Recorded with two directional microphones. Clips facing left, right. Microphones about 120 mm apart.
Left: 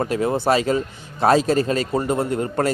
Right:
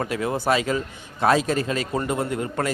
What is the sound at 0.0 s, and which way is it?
A man's voice, 30° left (ahead or behind).